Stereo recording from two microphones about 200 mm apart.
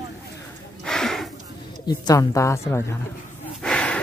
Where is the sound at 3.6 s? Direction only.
5° left (ahead or behind).